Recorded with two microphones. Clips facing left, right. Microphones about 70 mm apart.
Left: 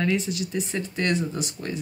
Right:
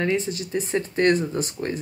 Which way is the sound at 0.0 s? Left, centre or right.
Right.